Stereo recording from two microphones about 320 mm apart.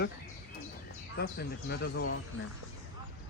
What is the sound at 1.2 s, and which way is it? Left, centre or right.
Speech, left.